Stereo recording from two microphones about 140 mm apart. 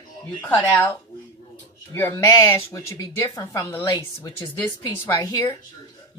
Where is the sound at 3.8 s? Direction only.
35° left (ahead or behind).